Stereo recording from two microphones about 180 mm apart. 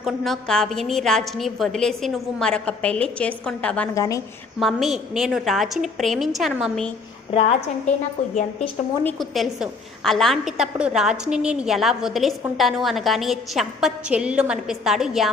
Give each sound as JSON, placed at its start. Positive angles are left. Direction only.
{"t": 0.0, "sound": "a woman's voice", "side_deg": 0}
{"t": 3.9, "sound": "a woman's voice", "side_deg": 20}
{"t": 4.6, "sound": "a woman's voice", "side_deg": 0}
{"t": 7.3, "sound": "a woman's voice", "side_deg": 30}
{"t": 9.0, "sound": "a woman's voice", "side_deg": 0}